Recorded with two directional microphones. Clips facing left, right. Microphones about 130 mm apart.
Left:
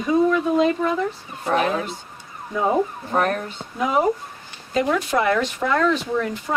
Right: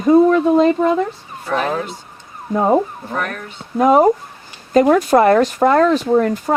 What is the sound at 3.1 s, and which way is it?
Speech, 35° left (ahead or behind).